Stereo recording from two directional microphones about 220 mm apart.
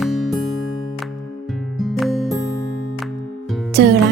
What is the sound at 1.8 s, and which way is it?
Music, centre (ahead or behind).